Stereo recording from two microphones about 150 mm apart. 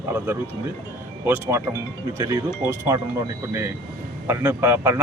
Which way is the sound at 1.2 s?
15° right (ahead or behind).